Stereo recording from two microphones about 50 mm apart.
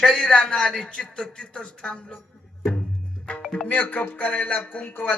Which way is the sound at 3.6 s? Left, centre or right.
Left.